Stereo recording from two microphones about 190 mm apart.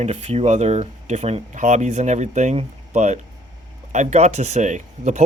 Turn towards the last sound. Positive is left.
turn(degrees=-40)  # may be behind; listen again after turning